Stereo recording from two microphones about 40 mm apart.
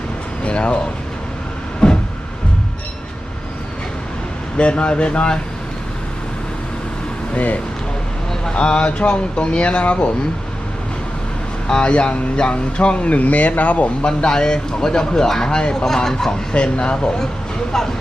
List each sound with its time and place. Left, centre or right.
0.4 s speech: left
1.8 s a sound: left
4.5 s speech: left
7.3 s speech: left
8.5 s speech: left
11.7 s speech: left
14.0 s speech: left
17.7 s speech: centre